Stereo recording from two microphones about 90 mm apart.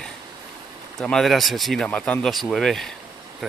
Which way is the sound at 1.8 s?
15° left (ahead or behind).